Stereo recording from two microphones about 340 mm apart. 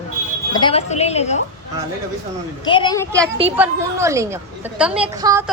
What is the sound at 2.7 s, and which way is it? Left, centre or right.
Speech, centre.